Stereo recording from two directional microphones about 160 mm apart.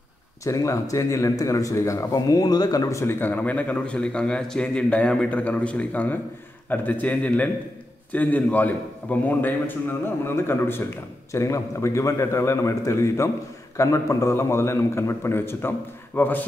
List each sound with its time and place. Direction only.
0.4 s a man's voice: 20° left (ahead or behind)